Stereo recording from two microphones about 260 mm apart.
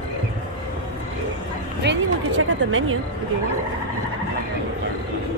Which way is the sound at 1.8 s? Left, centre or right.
Right.